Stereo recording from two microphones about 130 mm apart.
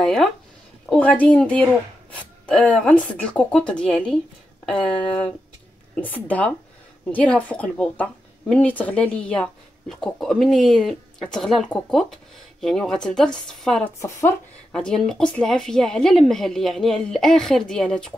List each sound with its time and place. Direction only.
0.0 s a woman's voice: 5° left (ahead or behind)
13.9 s speech: 20° left (ahead or behind)
14.7 s speech: 5° left (ahead or behind)